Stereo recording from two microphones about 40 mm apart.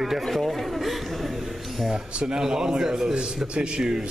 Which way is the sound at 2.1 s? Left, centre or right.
Right.